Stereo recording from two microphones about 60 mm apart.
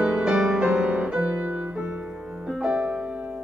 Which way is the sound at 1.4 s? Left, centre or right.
Right.